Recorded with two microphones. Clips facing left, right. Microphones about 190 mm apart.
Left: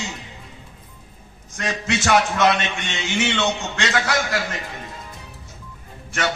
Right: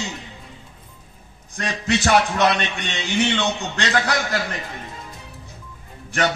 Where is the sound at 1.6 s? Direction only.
35° right (ahead or behind).